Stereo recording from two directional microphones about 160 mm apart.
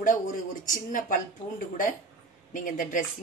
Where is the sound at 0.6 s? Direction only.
55° left (ahead or behind).